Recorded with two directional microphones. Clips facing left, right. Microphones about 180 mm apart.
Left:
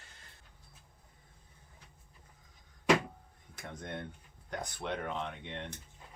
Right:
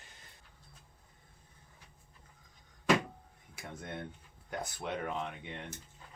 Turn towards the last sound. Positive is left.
turn(degrees=-5)  # may be behind; listen again after turning